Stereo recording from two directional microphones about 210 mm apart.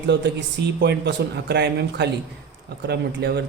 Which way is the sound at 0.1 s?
55° right (ahead or behind).